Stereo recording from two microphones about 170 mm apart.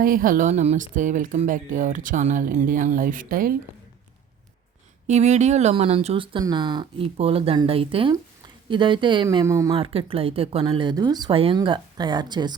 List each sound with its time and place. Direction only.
0.0 s speech: 55° right (ahead or behind)
5.0 s speech: 40° right (ahead or behind); by 9.7 s 20° right (ahead or behind)
9.7 s speech: 35° right (ahead or behind)